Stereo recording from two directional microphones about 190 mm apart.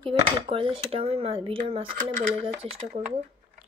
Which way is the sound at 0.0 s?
30° right (ahead or behind).